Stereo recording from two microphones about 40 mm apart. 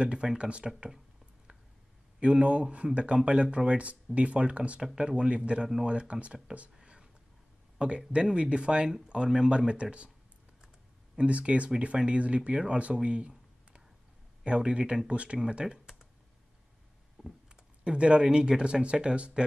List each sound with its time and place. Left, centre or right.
0.0 s speech: right
2.1 s speech: right
6.8 s whispering: centre
8.1 s speech: right
11.1 s speech: right
14.4 s speech: right
15.6 s computer keyboard: centre
17.2 s a sound: centre
17.8 s speech: right